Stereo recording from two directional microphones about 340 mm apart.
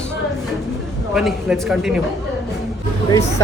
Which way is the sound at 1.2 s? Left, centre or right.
Centre.